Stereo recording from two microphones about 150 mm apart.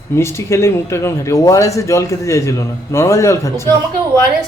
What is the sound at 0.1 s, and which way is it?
Speech, 15° left (ahead or behind).